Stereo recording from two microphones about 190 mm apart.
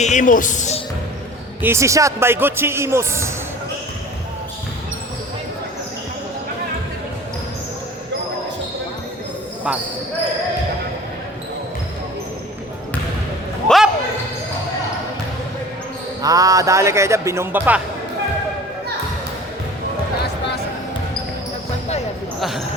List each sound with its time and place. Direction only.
0.0 s a man's voice: 40° left (ahead or behind)
1.6 s a man's voice: 15° right (ahead or behind)
13.7 s basketball bounce: centre (ahead or behind)
16.2 s a man's voice: 20° right (ahead or behind)
22.4 s basketball bounce: centre (ahead or behind)